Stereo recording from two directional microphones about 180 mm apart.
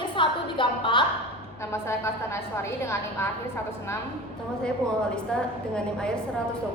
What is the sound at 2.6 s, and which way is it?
Speech, 15° left (ahead or behind).